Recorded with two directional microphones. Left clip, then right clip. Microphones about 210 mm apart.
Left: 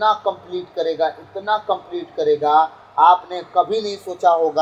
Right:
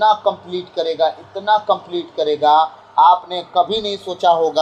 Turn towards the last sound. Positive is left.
turn(degrees=-25)  # may be behind; listen again after turning